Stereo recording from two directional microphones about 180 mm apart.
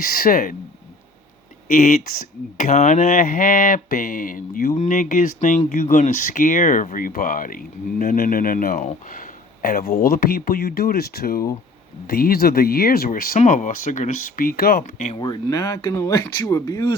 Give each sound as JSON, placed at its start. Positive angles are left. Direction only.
{"t": 0.2, "sound": "speech", "side_deg": 50}
{"t": 1.7, "sound": "speech", "side_deg": 55}
{"t": 2.6, "sound": "speech", "side_deg": 40}
{"t": 15.2, "sound": "speech", "side_deg": 20}